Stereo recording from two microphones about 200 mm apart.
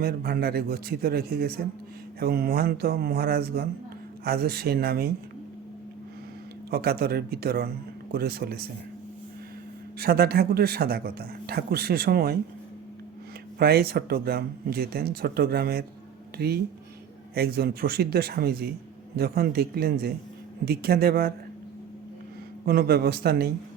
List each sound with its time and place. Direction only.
0.0 s speech: 50° right (ahead or behind)
6.7 s speech: 50° right (ahead or behind)
10.0 s speech: 50° right (ahead or behind)
13.6 s speech: 50° right (ahead or behind)
22.6 s speech: 50° right (ahead or behind)